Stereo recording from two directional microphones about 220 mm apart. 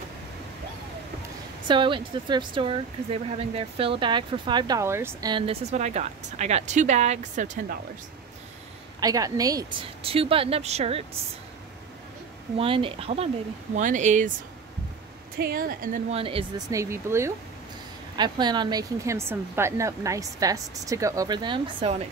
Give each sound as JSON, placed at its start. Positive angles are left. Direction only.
{"t": 1.7, "sound": "speech", "side_deg": -20}
{"t": 9.0, "sound": "speech", "side_deg": -15}
{"t": 12.5, "sound": "speech", "side_deg": -25}
{"t": 15.3, "sound": "speech", "side_deg": -40}
{"t": 16.1, "sound": "speech", "side_deg": -25}
{"t": 16.7, "sound": "speech", "side_deg": -10}